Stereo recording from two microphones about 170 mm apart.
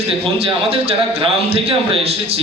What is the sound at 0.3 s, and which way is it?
A man's voice, 35° right (ahead or behind).